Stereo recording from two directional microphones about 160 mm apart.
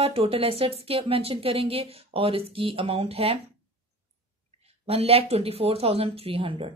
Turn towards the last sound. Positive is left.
turn(degrees=-35)  # may be behind; listen again after turning